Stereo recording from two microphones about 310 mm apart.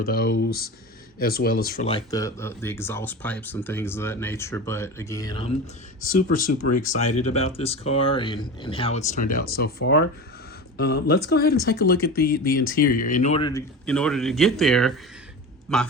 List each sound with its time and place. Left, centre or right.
0.0 s speech: left
6.1 s speech: left
6.5 s speech: left
6.7 s a man's voice: left; by 15.9 s centre